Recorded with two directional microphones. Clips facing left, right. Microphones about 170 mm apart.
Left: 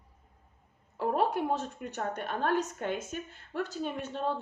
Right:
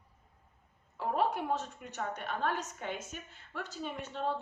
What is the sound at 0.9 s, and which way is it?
Speech, 40° left (ahead or behind).